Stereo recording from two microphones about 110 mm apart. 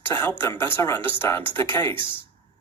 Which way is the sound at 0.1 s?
20° left (ahead or behind).